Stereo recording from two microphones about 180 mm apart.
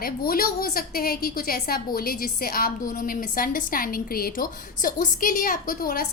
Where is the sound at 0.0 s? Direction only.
55° left (ahead or behind).